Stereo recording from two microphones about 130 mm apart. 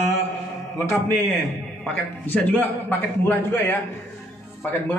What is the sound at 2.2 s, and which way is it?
A man's voice, 15° left (ahead or behind).